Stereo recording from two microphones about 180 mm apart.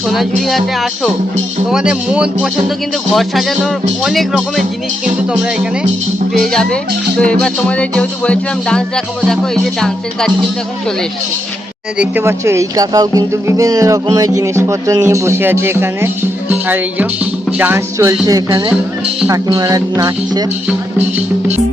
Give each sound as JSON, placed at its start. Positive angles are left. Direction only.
{"t": 0.1, "sound": "speech", "side_deg": 0}
{"t": 6.3, "sound": "speech", "side_deg": 0}
{"t": 11.9, "sound": "speech", "side_deg": -15}